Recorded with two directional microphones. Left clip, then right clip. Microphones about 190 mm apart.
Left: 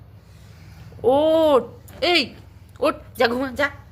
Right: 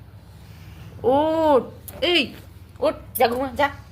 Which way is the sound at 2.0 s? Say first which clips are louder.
Left 1 dB; 35° left (ahead or behind).